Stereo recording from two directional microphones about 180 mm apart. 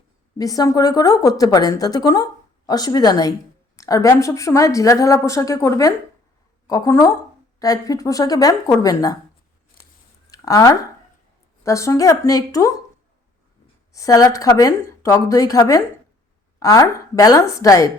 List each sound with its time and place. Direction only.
0.3 s a woman's voice: 20° left (ahead or behind)
9.8 s scissors: 50° left (ahead or behind)
10.2 s a sound: 20° left (ahead or behind)
11.6 s speech: 15° left (ahead or behind)
13.9 s a woman's voice: 20° left (ahead or behind)